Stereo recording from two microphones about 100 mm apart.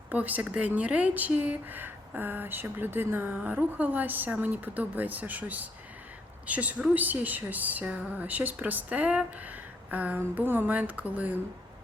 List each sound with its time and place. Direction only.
0.1 s speech: 15° right (ahead or behind)